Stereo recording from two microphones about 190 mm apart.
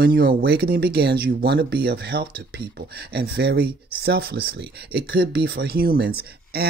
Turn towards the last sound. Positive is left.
turn(degrees=-55)  # may be behind; listen again after turning